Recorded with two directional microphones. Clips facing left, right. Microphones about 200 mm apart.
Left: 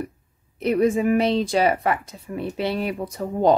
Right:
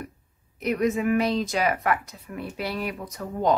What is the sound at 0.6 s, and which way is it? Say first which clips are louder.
Speech: left 5 dB; 30° left (ahead or behind).